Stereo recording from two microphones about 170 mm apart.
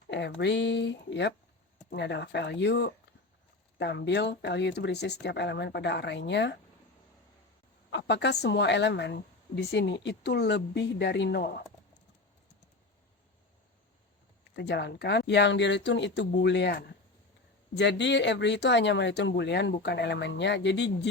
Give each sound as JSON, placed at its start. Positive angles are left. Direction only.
{"t": 0.1, "sound": "speech", "side_deg": 90}
{"t": 7.9, "sound": "speech", "side_deg": 90}
{"t": 14.5, "sound": "speech", "side_deg": 80}
{"t": 17.7, "sound": "speech", "side_deg": 90}